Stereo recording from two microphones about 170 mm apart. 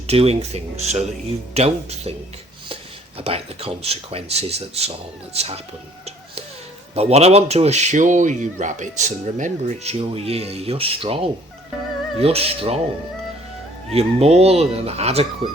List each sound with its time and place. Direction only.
0.1 s a man's voice: 35° right (ahead or behind)
3.2 s a man's voice: 35° right (ahead or behind)
6.9 s a man's voice: 40° right (ahead or behind)
13.9 s a man's voice: 35° right (ahead or behind)